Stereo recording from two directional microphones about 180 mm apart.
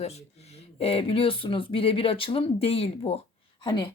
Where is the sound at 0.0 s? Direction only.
35° left (ahead or behind).